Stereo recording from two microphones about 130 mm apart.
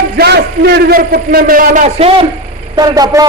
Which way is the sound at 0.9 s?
90° right.